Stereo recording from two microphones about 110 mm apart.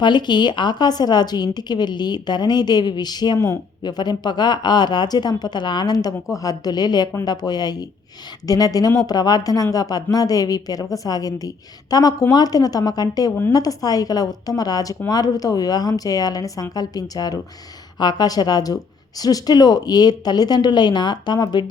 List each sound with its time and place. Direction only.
0.0 s speech: 45° left (ahead or behind)
3.3 s speech: 20° left (ahead or behind)
3.8 s speech: 40° left (ahead or behind)